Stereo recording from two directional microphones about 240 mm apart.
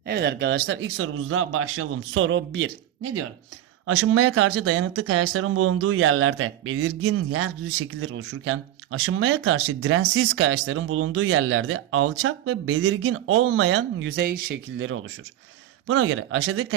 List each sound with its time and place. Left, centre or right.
0.0 s speech: right
3.8 s speech: right
14.8 s speech: right